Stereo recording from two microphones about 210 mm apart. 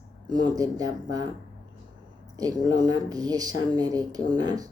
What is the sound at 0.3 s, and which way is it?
Speech, 20° right (ahead or behind).